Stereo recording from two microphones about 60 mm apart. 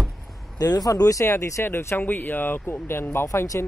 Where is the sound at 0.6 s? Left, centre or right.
Left.